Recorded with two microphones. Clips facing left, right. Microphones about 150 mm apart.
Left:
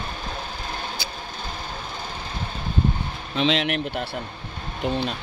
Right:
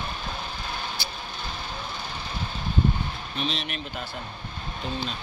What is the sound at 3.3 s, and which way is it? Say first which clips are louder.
Speech: left 11 dB; 90° left.